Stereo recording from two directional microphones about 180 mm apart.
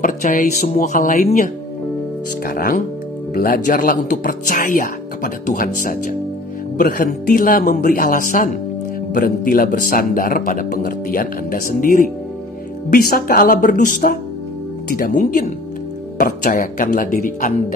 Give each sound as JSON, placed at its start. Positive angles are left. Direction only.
{"t": 0.0, "sound": "speech", "side_deg": 50}